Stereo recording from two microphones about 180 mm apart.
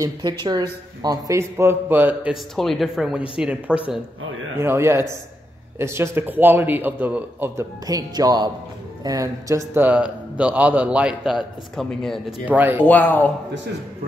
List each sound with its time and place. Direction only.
0.0 s a man's voice: 25° right (ahead or behind)
2.5 s a man's voice: centre (ahead or behind)
12.8 s speech: 10° left (ahead or behind)